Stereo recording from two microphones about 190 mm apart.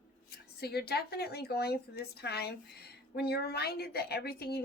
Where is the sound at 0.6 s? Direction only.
55° left (ahead or behind).